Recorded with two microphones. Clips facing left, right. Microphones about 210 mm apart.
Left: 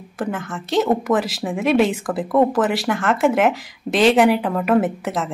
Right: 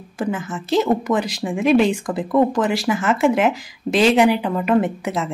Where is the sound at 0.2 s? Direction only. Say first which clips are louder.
Right 1 dB; centre (ahead or behind).